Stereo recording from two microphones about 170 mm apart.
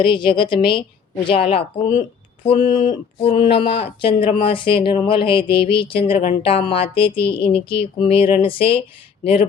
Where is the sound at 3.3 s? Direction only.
30° left (ahead or behind).